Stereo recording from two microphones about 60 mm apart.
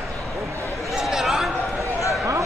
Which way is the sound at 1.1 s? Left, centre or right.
Centre.